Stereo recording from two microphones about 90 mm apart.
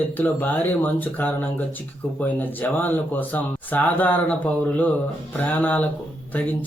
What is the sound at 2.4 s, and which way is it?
Speech, 20° left (ahead or behind).